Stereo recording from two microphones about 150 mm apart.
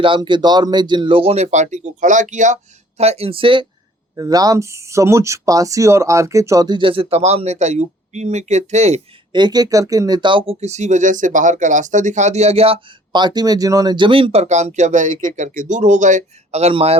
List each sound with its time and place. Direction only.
0.0 s speech: 35° right (ahead or behind); by 2.6 s 55° right (ahead or behind)
3.0 s speech: 45° right (ahead or behind)
4.1 s speech: 25° right (ahead or behind); by 9.0 s 50° right (ahead or behind)
9.3 s speech: 30° right (ahead or behind)